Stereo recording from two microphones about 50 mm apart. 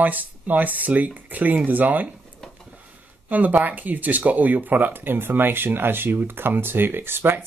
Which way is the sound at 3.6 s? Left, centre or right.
Right.